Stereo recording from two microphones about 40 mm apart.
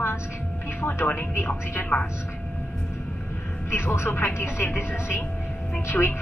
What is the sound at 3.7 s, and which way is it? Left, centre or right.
Speech, left.